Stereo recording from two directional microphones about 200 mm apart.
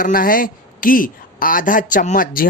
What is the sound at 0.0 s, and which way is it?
A man's voice, 45° left (ahead or behind).